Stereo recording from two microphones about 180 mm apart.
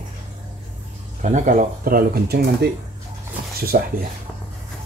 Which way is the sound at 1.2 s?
45° right (ahead or behind).